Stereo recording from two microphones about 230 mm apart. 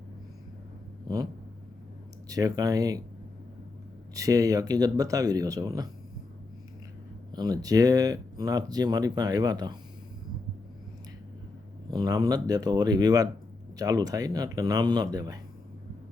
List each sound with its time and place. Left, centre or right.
1.0 s vehicle: centre
2.3 s speech: centre
4.1 s speech: centre
7.3 s speech: centre
11.9 s speech: centre